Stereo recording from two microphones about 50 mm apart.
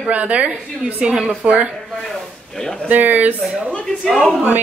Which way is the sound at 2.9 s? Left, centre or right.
Right.